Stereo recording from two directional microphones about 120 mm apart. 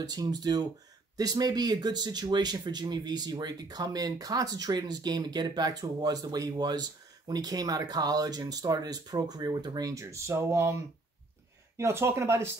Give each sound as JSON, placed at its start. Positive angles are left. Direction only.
{"t": 0.0, "sound": "speech", "side_deg": -35}